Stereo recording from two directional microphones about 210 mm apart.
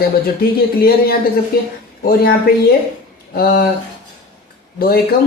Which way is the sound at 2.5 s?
45° left (ahead or behind).